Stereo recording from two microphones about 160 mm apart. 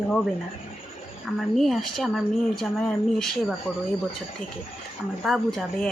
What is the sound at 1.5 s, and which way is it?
Speech, centre (ahead or behind).